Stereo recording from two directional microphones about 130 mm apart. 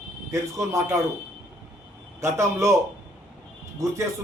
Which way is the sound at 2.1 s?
20° right (ahead or behind).